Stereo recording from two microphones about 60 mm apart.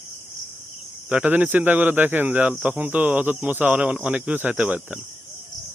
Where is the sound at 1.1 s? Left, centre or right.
Right.